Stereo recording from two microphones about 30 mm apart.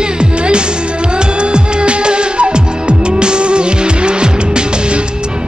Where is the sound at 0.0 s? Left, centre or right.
Right.